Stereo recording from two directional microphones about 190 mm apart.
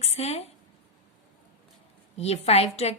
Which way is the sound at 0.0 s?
35° left (ahead or behind).